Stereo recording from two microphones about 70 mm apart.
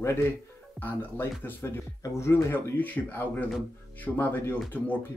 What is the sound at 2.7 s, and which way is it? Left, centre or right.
Speech, left.